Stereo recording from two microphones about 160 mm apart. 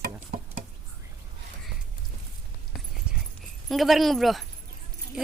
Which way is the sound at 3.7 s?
Centre (ahead or behind).